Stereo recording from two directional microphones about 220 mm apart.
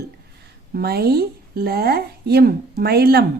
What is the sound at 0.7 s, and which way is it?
Speech, 45° right (ahead or behind).